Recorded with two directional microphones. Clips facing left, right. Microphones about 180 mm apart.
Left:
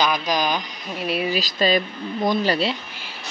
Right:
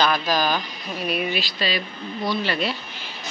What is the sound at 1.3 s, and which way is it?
Speech, 40° left (ahead or behind).